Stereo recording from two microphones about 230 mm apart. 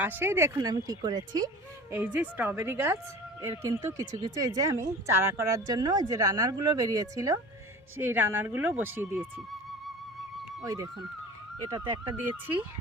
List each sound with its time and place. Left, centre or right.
0.0 s speech: centre
10.6 s speech: centre